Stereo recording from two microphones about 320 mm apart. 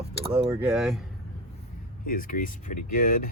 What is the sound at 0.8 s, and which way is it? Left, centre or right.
Speech, centre.